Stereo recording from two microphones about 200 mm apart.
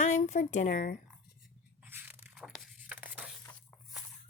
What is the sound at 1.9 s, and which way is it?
Biting, 10° right (ahead or behind).